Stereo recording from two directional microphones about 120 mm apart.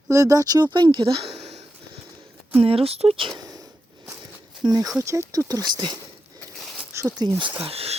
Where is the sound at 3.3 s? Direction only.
30° right (ahead or behind).